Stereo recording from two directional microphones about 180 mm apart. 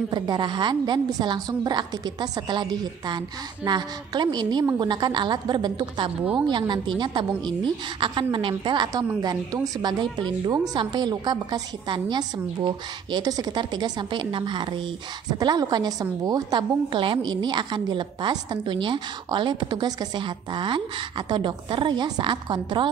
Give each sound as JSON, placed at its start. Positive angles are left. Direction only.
{"t": 0.1, "sound": "a woman's voice", "side_deg": -25}